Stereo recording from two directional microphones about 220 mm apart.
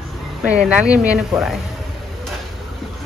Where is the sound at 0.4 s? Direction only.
5° right (ahead or behind).